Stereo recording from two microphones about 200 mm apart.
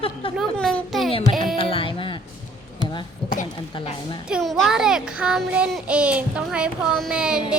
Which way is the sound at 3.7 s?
25° left (ahead or behind).